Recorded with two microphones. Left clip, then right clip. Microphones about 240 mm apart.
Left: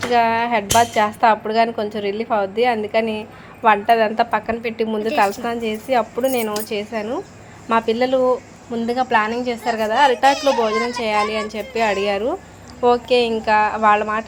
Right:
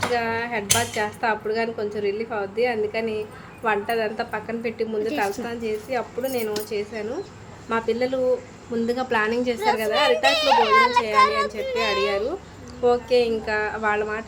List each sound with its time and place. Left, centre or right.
0.1 s a woman's voice: centre
10.3 s a child's voice: right
11.0 s a woman's voice: centre